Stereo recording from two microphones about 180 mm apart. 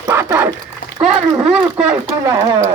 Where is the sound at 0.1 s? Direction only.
15° right (ahead or behind).